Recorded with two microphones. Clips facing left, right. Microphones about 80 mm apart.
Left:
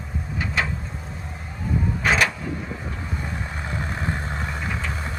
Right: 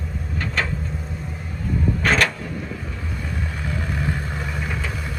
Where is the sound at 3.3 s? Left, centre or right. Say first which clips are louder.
Right 2 dB; left.